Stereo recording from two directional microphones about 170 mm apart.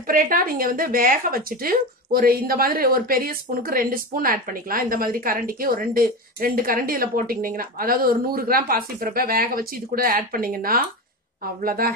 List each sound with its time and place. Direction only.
0.0 s speech: 55° right (ahead or behind)